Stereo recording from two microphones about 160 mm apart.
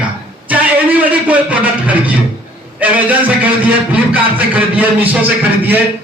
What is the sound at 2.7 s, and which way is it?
A man's voice, 10° right (ahead or behind).